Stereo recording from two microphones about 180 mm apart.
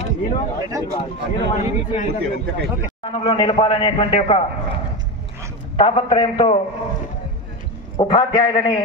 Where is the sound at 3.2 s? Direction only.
25° left (ahead or behind).